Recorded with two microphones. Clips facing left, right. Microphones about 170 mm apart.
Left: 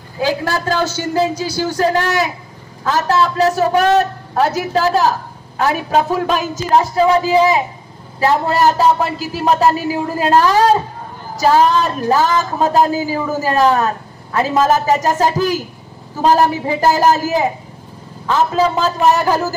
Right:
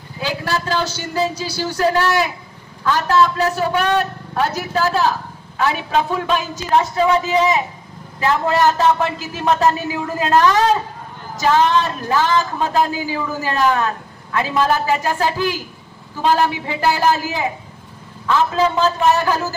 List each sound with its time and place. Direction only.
0.2 s a man's voice: 45° left (ahead or behind)